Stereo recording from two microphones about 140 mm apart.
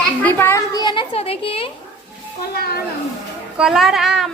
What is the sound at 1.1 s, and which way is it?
Speech, 45° left (ahead or behind).